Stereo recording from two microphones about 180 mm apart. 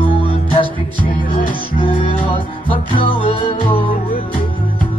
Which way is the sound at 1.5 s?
30° left (ahead or behind).